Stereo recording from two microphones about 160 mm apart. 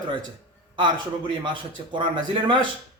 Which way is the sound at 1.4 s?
30° right (ahead or behind).